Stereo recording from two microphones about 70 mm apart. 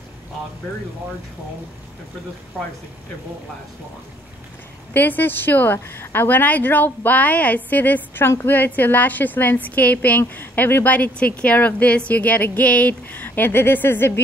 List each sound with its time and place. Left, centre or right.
4.9 s a woman's voice: left